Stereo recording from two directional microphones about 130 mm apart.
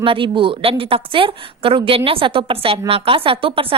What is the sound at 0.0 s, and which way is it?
A woman's voice, 40° right (ahead or behind).